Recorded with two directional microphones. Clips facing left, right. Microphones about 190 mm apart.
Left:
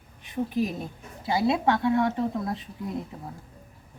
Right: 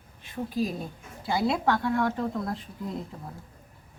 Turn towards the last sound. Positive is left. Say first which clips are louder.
# left 2 dB
turn(degrees=20)  # may be behind; listen again after turning